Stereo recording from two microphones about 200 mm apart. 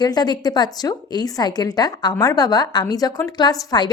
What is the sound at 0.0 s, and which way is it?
A woman's voice, 20° left (ahead or behind).